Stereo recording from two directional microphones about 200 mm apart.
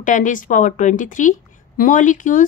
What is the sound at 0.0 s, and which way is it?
A woman's voice, 40° left (ahead or behind).